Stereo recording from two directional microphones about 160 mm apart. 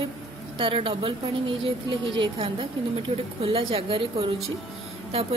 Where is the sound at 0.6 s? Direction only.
35° right (ahead or behind).